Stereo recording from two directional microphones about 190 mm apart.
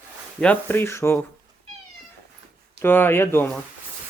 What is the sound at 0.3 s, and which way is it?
Speech, 5° left (ahead or behind).